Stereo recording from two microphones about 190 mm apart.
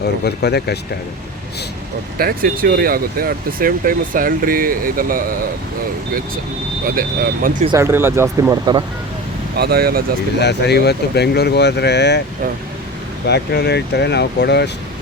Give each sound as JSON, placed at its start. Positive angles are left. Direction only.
{"t": 0.0, "sound": "speech", "side_deg": 60}
{"t": 2.1, "sound": "speech", "side_deg": -50}
{"t": 6.8, "sound": "speech", "side_deg": -50}
{"t": 7.8, "sound": "speech", "side_deg": -15}
{"t": 9.6, "sound": "speech", "side_deg": -55}
{"t": 10.4, "sound": "speech", "side_deg": 60}
{"t": 13.2, "sound": "speech", "side_deg": 60}